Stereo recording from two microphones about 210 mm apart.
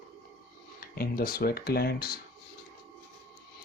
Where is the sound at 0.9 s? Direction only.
45° left (ahead or behind).